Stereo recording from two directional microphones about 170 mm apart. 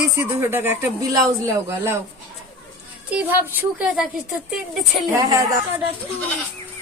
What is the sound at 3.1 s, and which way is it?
Speech, 10° right (ahead or behind).